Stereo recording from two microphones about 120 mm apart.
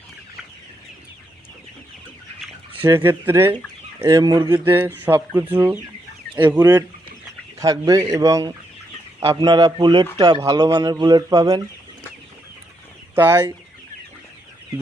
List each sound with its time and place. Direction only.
2.8 s speech: 20° right (ahead or behind)
4.2 s speech: 35° right (ahead or behind)
4.6 s speech: 15° right (ahead or behind)
6.6 s speech: 30° right (ahead or behind)
13.1 s speech: 20° right (ahead or behind)